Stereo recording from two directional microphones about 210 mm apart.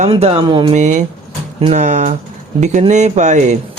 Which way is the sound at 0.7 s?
35° right (ahead or behind).